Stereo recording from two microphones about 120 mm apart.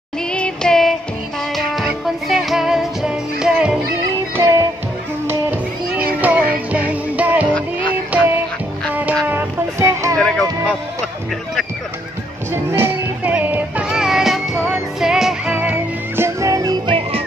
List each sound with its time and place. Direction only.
0.3 s music: 5° left (ahead or behind)
4.4 s music: 25° right (ahead or behind)
5.3 s music: 15° right (ahead or behind)
9.3 s music: 25° right (ahead or behind)
10.1 s music: 5° left (ahead or behind)
12.7 s music: 15° right (ahead or behind)
15.5 s music: 15° right (ahead or behind)
16.8 s music: 50° right (ahead or behind)